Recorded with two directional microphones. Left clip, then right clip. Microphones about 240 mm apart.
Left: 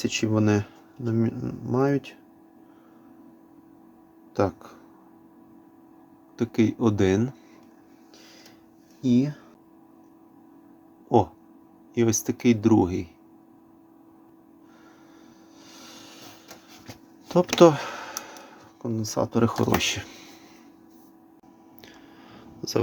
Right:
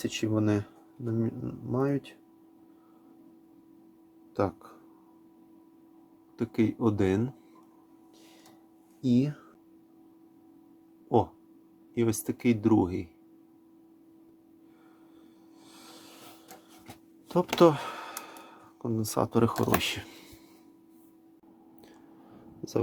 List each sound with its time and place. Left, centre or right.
0.0 s speech: centre
4.4 s speech: centre
6.3 s speech: centre
9.0 s speech: centre
11.9 s speech: centre
17.2 s a sound: centre
19.0 s speech: centre
21.8 s a sound: centre